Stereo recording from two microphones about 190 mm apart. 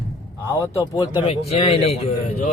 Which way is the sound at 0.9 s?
25° left (ahead or behind).